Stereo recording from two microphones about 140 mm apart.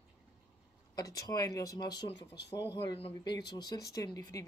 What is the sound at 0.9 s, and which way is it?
Speech, 25° left (ahead or behind).